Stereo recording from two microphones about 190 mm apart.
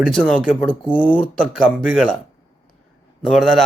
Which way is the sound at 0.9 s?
10° left (ahead or behind).